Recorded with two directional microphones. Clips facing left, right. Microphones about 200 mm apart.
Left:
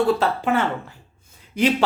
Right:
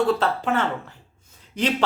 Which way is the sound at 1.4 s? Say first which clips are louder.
Left 5 dB; 10° left (ahead or behind).